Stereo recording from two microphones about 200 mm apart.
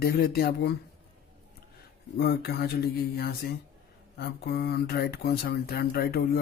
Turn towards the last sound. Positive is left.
turn(degrees=50)  # may be behind; listen again after turning